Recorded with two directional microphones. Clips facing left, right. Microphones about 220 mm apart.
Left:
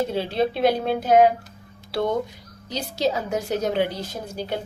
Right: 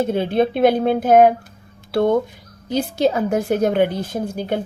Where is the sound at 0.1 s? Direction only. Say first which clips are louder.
Right 5 dB; 55° right (ahead or behind).